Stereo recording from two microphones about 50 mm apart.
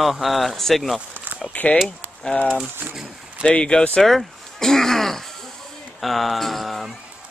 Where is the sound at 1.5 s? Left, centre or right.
Left.